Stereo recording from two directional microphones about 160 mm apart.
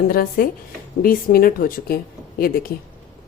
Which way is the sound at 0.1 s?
65° left (ahead or behind).